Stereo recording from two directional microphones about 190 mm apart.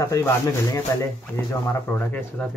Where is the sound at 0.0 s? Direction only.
15° left (ahead or behind).